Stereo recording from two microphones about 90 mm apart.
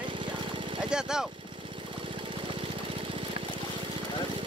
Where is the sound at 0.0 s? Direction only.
65° right (ahead or behind).